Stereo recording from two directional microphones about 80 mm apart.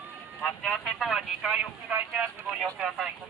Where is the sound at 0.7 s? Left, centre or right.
Centre.